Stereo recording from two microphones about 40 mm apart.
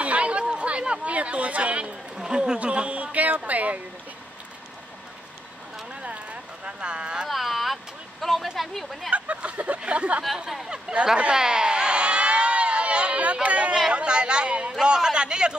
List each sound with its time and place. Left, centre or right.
0.0 s chatter: right
1.0 s speech: right
2.1 s a man's voice: centre
2.6 s speech: right
6.0 s clip-clop: right
7.2 s vehicle: centre
8.5 s speech: centre
9.1 s a sound: right
9.8 s speech: right
10.3 s speech: centre
11.3 s a sound: centre; by 13.7 s right
13.9 s a man's voice: right